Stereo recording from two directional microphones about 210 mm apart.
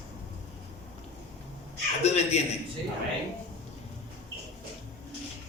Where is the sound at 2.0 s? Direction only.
30° left (ahead or behind).